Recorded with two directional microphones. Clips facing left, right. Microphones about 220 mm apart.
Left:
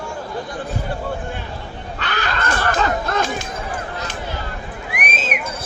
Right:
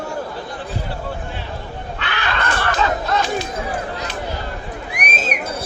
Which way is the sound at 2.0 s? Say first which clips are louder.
Even; 45° left (ahead or behind).